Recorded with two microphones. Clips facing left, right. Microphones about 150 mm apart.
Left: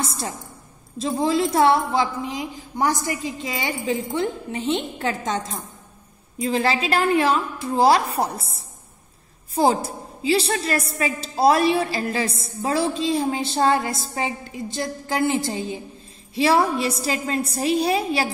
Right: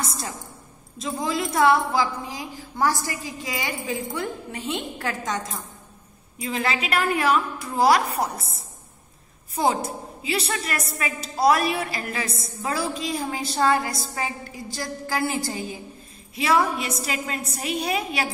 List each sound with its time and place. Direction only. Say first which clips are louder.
0.0 s a sound: left 3 dB; 30° left (ahead or behind)
0.9 s a woman's voice: left 6 dB; 30° left (ahead or behind)
9.6 s a woman's voice: left 4 dB; 30° left (ahead or behind)